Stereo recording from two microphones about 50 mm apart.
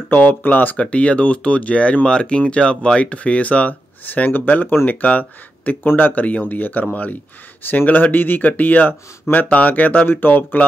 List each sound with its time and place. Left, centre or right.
0.1 s speech: left
0.7 s speech: left